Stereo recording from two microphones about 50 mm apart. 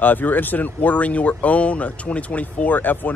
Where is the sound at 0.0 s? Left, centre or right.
Left.